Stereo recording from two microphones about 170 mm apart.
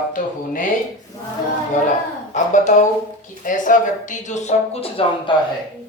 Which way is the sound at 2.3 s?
45° left (ahead or behind).